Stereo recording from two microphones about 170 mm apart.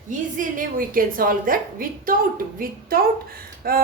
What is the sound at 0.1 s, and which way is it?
A woman's voice, 50° right (ahead or behind).